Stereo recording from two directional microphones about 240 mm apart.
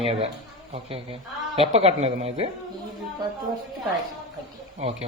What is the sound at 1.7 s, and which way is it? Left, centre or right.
Speech, right.